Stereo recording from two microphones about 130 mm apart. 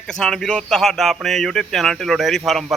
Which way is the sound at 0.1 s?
5° left (ahead or behind).